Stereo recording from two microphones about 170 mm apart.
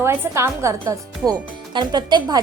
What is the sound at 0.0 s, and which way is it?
A woman's voice, 15° right (ahead or behind).